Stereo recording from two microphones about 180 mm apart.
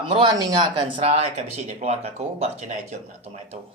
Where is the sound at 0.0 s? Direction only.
25° right (ahead or behind).